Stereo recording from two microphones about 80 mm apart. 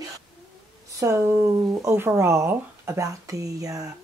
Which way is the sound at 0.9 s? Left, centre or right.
Right.